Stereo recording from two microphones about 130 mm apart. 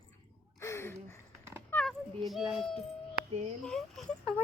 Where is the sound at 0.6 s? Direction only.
20° left (ahead or behind).